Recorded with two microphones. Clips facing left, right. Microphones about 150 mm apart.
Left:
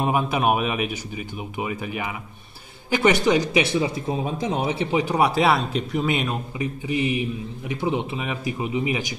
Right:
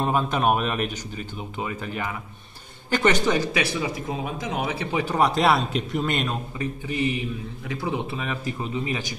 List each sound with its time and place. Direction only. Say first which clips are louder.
0.0 s speech: left 1 dB; 10° left (ahead or behind)
6.6 s speech: left 2 dB; 15° left (ahead or behind)